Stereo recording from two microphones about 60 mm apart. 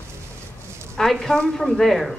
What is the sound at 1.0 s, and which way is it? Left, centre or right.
Speech, centre.